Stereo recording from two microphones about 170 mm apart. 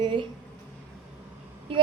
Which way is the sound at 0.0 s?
30° right (ahead or behind).